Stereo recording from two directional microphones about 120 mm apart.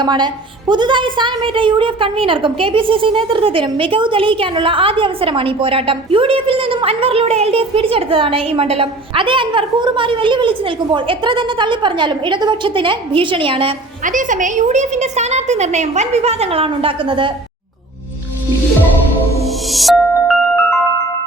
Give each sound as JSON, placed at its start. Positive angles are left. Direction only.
{"t": 0.0, "sound": "a woman's voice", "side_deg": -40}
{"t": 14.0, "sound": "a woman's voice", "side_deg": -90}
{"t": 19.7, "sound": "music", "side_deg": 0}